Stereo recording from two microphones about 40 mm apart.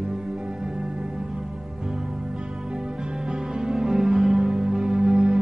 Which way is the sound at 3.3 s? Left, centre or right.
Centre.